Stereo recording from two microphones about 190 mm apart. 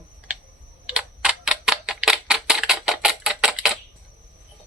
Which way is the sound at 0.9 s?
5° right (ahead or behind).